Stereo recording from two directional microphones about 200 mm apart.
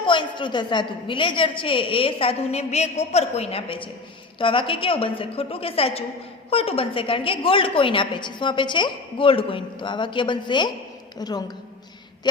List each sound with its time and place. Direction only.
0.0 s a woman's voice: 25° left (ahead or behind)